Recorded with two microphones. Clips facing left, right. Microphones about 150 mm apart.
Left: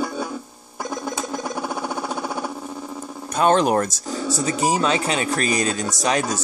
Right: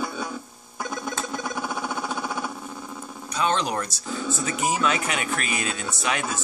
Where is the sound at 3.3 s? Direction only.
50° left (ahead or behind).